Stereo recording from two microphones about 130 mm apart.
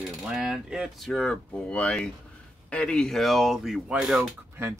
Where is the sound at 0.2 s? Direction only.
5° right (ahead or behind).